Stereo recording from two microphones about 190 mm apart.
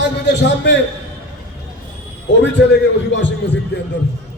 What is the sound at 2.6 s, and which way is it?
A man's voice, 65° left (ahead or behind).